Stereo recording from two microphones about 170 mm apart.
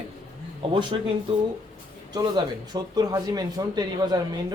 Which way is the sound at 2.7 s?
25° right (ahead or behind).